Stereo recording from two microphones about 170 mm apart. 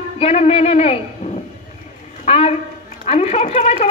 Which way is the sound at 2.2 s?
35° left (ahead or behind).